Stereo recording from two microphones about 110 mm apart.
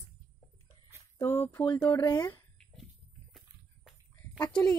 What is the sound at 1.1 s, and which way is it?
Speech, 20° left (ahead or behind).